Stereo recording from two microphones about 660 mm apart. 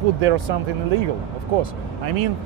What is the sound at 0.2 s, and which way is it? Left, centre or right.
Speech, right.